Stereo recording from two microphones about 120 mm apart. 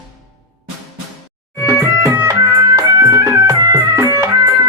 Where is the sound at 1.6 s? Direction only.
20° right (ahead or behind).